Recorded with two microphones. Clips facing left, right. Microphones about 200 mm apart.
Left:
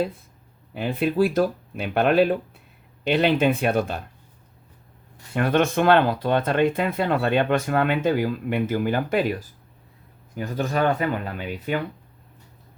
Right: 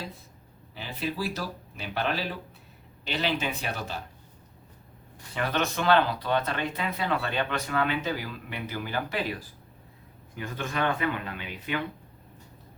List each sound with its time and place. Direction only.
0.7 s speech: 55° left (ahead or behind)
5.3 s speech: 50° left (ahead or behind)
10.3 s speech: 40° left (ahead or behind)